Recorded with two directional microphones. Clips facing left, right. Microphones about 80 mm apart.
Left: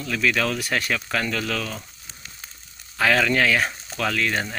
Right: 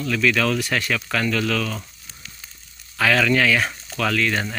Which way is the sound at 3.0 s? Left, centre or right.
Left.